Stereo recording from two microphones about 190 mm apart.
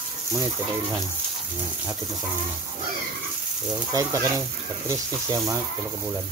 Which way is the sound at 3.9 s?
15° right (ahead or behind).